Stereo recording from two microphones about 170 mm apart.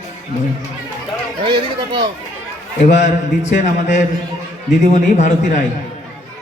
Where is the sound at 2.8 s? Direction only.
45° left (ahead or behind).